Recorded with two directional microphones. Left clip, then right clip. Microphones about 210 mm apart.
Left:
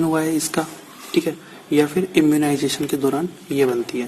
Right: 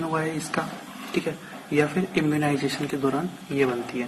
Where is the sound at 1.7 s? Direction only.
70° left (ahead or behind).